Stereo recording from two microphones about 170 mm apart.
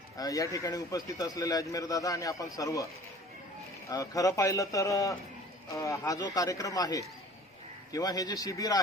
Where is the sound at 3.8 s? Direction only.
20° left (ahead or behind).